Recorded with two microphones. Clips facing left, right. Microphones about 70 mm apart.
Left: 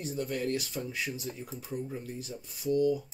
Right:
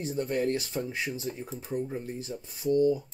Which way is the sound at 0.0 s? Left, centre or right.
Right.